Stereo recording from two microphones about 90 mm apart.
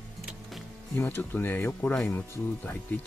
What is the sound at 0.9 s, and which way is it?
Speech, 25° left (ahead or behind).